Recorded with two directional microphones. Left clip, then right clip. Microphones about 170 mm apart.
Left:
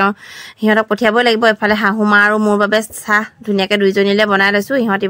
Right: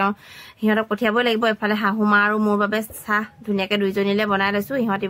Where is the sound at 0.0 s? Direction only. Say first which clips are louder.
Left 7 dB; 55° left (ahead or behind).